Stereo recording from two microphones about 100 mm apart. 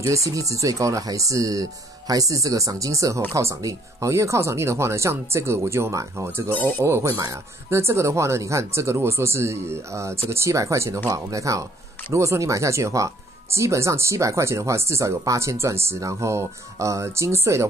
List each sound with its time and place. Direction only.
0.3 s speech: 35° right (ahead or behind)